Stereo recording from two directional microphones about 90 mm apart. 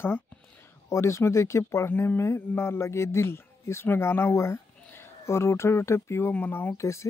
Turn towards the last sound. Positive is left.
turn(degrees=30)  # may be behind; listen again after turning